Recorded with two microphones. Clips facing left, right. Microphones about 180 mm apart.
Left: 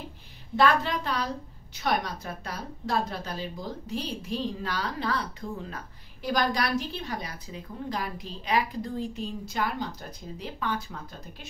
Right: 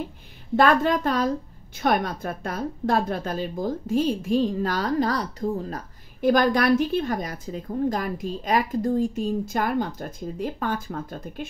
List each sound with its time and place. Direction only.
0.6 s a woman's voice: 50° right (ahead or behind)